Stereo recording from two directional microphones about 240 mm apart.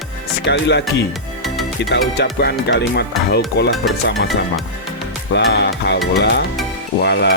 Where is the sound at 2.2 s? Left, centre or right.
Left.